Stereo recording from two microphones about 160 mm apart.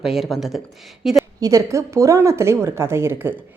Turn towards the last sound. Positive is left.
turn(degrees=-15)  # may be behind; listen again after turning